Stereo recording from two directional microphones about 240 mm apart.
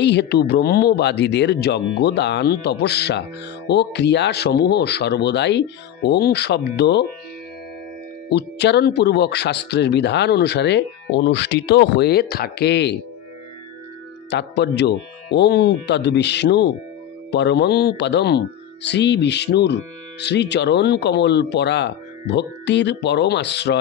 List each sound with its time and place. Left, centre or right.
0.0 s speech: left
8.3 s speech: left
14.3 s speech: left